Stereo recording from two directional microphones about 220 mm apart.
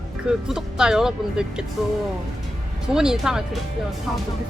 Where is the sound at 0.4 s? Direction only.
5° right (ahead or behind).